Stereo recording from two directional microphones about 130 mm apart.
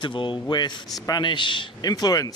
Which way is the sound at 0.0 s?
40° left (ahead or behind).